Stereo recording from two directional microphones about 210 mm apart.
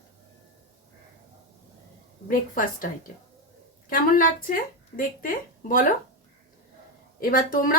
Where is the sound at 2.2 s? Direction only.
40° left (ahead or behind).